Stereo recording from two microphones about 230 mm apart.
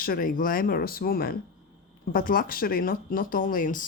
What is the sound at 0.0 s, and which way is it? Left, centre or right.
Speech, left.